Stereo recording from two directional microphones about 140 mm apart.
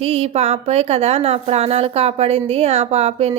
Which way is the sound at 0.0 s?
45° right (ahead or behind).